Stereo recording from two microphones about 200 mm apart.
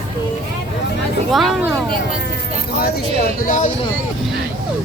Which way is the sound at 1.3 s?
Centre (ahead or behind).